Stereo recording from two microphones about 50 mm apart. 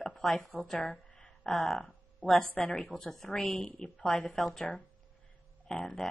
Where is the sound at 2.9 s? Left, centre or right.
Centre.